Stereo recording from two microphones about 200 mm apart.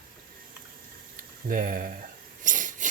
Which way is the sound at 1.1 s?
40° right (ahead or behind).